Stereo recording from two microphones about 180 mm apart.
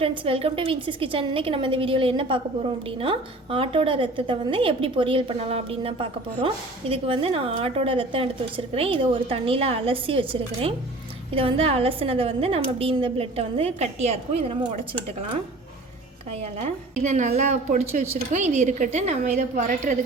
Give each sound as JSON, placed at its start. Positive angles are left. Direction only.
{"t": 0.0, "sound": "a woman's voice", "side_deg": -30}
{"t": 16.4, "sound": "a woman's voice", "side_deg": -35}